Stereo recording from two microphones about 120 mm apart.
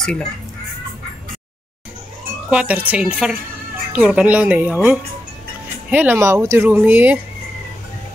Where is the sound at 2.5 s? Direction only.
10° right (ahead or behind).